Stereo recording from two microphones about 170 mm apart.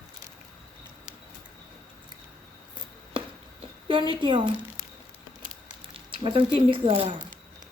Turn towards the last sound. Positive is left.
turn(degrees=-35)  # may be behind; listen again after turning